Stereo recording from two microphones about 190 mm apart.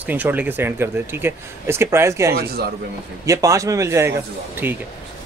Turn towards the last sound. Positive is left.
turn(degrees=-10)  # may be behind; listen again after turning